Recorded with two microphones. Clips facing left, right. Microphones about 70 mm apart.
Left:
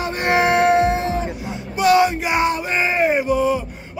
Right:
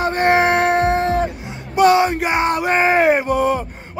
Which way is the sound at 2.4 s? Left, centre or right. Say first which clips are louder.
Right 4 dB; right.